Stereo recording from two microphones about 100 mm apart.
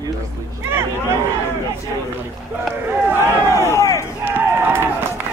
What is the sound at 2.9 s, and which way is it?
Speech, 25° right (ahead or behind).